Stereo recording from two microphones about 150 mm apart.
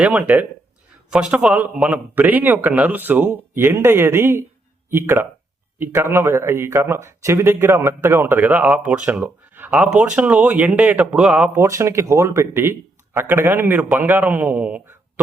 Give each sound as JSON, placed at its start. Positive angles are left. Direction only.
{"t": 0.0, "sound": "a man's voice", "side_deg": -10}
{"t": 11.6, "sound": "a man's voice", "side_deg": -20}